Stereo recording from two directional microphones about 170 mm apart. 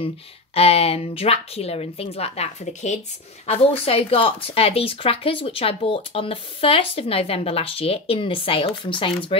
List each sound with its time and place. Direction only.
0.6 s speech: 35° left (ahead or behind)